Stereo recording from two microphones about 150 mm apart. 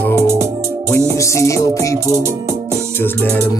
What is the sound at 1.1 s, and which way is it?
Music, 20° left (ahead or behind).